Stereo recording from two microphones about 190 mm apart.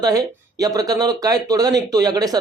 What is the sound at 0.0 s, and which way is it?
Speech, 20° right (ahead or behind).